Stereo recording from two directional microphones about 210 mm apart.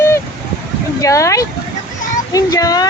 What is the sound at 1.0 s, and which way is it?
Speech, 15° left (ahead or behind).